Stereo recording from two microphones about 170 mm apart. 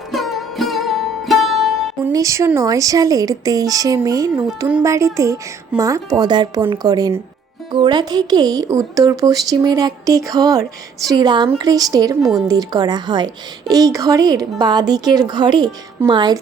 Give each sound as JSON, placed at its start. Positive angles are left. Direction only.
{"t": 0.1, "sound": "music", "side_deg": 0}
{"t": 2.1, "sound": "a woman's voice", "side_deg": -20}